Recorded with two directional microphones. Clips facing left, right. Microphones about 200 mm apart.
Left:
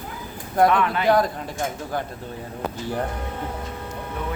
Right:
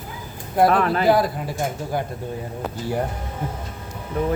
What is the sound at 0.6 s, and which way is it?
Speech, 35° right (ahead or behind).